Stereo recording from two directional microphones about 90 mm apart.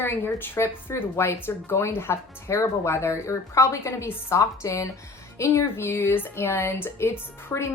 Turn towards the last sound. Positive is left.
turn(degrees=35)  # may be behind; listen again after turning